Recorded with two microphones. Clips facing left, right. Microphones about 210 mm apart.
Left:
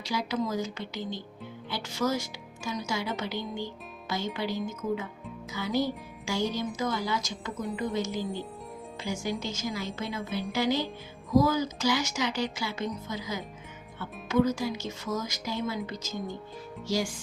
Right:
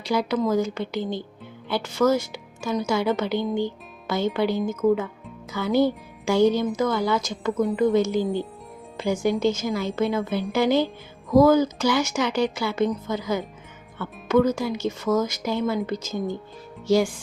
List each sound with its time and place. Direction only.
0.0 s a woman's voice: 55° right (ahead or behind)
7.5 s a woman's voice: centre (ahead or behind)
7.9 s a woman's voice: 55° right (ahead or behind)